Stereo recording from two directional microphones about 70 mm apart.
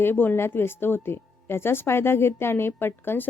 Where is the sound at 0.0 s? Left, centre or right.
Left.